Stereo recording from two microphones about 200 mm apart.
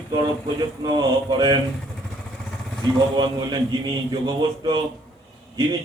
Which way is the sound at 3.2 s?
20° right (ahead or behind).